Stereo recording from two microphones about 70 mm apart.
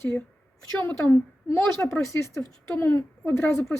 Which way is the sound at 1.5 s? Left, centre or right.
Left.